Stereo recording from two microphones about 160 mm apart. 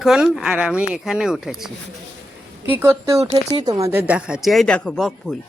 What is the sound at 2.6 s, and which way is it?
Speech, 15° right (ahead or behind).